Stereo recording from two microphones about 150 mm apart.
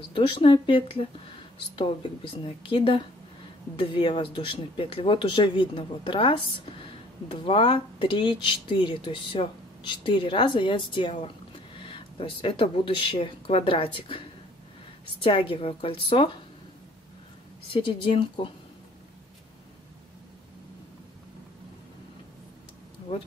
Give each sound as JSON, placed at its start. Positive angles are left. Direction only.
{"t": 0.1, "sound": "speech", "side_deg": 35}
{"t": 2.4, "sound": "speech", "side_deg": 35}
{"t": 15.2, "sound": "speech", "side_deg": 35}
{"t": 17.7, "sound": "speech", "side_deg": 35}